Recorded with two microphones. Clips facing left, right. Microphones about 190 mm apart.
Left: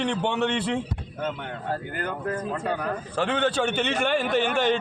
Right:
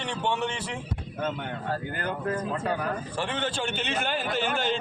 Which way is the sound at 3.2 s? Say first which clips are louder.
Left 8 dB; 60° left (ahead or behind).